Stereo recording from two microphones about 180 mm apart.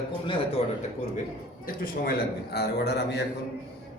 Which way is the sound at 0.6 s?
35° left (ahead or behind).